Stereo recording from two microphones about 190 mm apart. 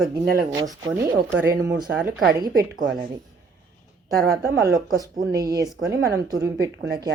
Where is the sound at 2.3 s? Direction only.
20° right (ahead or behind).